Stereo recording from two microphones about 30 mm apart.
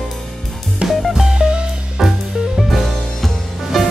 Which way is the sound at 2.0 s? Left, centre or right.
Centre.